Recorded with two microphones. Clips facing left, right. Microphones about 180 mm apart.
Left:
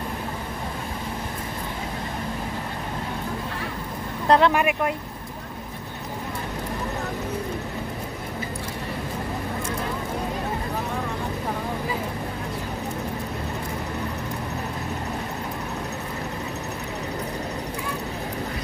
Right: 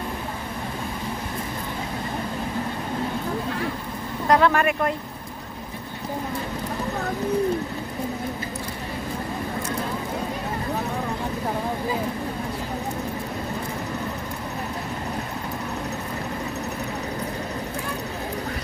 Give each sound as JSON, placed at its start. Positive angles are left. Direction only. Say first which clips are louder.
{"t": 4.3, "sound": "speech", "louder": "even", "side_deg": 20}